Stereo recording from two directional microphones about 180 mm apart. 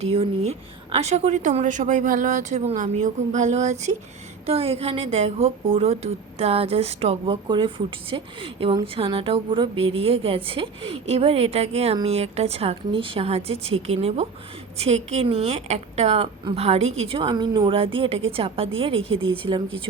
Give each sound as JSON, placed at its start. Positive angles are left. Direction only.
{"t": 0.0, "sound": "a woman's voice", "side_deg": -35}